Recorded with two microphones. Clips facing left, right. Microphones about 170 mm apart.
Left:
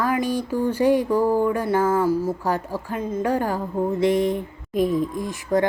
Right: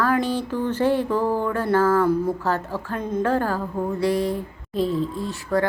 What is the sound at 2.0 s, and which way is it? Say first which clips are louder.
A woman's voice: right 1 dB; 5° left (ahead or behind).